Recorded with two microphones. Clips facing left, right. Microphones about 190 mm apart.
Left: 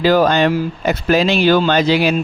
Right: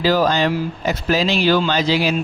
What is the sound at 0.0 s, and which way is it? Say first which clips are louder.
Speech: left 4 dB; 55° left (ahead or behind).